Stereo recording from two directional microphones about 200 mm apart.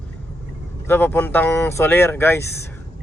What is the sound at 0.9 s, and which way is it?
Speech, 10° left (ahead or behind).